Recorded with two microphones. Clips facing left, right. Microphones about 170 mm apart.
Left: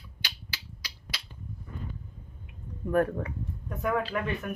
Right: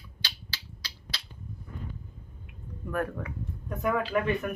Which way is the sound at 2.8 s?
30° left (ahead or behind).